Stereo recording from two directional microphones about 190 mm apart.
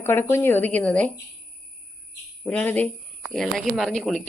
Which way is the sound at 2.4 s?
5° left (ahead or behind).